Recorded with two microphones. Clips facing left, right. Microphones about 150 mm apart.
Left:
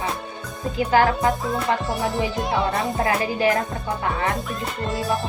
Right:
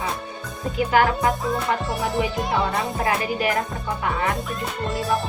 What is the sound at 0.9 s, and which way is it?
Speech, 25° left (ahead or behind).